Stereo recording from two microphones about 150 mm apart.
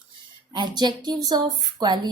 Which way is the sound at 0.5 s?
30° right (ahead or behind).